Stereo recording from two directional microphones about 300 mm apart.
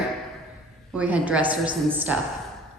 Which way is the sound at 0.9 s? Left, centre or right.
Centre.